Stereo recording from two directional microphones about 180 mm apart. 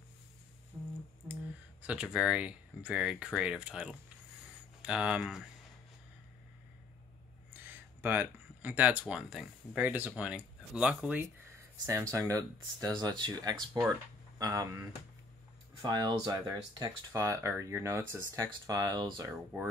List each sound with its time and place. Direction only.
0.7 s a sound: 10° right (ahead or behind)
1.2 s speech: 10° right (ahead or behind)
7.5 s speech: 10° right (ahead or behind)